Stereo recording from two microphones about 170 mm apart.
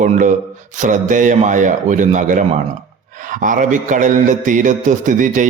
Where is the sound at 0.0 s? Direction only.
45° right (ahead or behind).